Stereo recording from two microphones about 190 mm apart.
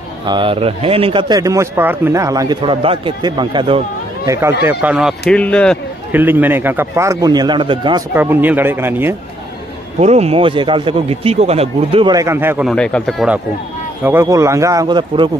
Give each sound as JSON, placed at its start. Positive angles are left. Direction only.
{"t": 0.3, "sound": "a man's voice", "side_deg": -25}
{"t": 4.3, "sound": "a man's voice", "side_deg": -15}
{"t": 5.3, "sound": "speech", "side_deg": 5}
{"t": 6.1, "sound": "a man's voice", "side_deg": -10}
{"t": 8.1, "sound": "a man's voice", "side_deg": -10}
{"t": 9.9, "sound": "a man's voice", "side_deg": -35}
{"t": 12.6, "sound": "speech", "side_deg": 5}
{"t": 14.0, "sound": "a man's voice", "side_deg": -15}